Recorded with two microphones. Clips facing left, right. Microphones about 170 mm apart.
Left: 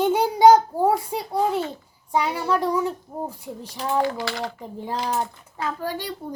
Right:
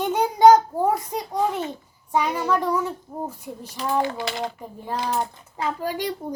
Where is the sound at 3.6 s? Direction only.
20° right (ahead or behind).